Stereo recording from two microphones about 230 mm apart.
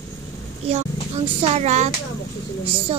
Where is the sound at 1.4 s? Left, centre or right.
Right.